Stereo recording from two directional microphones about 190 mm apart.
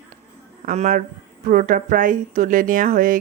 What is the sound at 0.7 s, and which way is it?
Speech, 40° right (ahead or behind).